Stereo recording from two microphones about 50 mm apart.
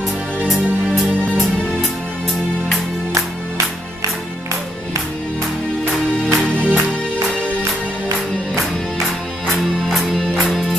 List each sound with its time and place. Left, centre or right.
0.5 s music: centre
5.9 s music: left
9.5 s music: centre